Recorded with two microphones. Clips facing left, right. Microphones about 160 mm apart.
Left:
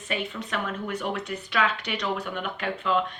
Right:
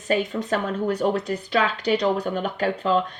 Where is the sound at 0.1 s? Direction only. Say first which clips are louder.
Right 8 dB; 40° right (ahead or behind).